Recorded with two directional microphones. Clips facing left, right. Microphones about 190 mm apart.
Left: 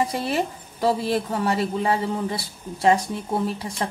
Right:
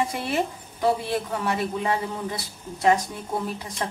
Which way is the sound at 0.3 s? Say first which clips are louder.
Left 1 dB; 35° left (ahead or behind).